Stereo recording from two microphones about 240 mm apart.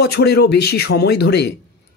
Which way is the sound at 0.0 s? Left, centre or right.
Left.